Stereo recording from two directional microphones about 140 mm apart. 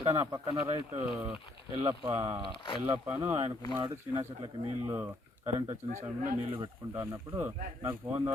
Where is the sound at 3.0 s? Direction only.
15° right (ahead or behind).